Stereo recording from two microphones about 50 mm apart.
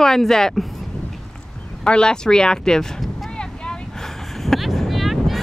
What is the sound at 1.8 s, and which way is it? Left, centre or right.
Speech, centre.